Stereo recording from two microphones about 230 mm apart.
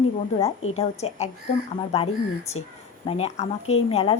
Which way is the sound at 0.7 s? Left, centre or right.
Left.